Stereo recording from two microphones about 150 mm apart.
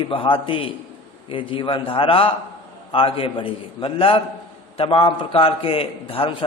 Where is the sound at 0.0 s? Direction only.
35° left (ahead or behind).